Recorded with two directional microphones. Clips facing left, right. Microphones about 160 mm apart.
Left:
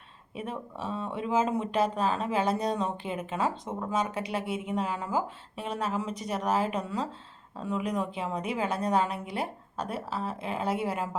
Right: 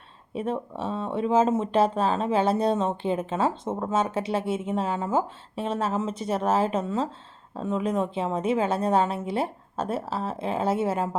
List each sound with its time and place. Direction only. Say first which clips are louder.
0.3 s speech: right 7 dB; 30° right (ahead or behind)